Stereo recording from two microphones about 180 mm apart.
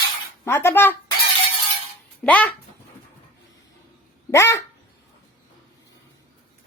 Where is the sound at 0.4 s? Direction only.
15° left (ahead or behind).